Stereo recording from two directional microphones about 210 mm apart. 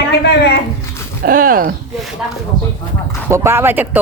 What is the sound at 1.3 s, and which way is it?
Speech, 40° right (ahead or behind).